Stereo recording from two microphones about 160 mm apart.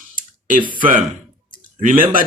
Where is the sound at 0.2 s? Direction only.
55° right (ahead or behind).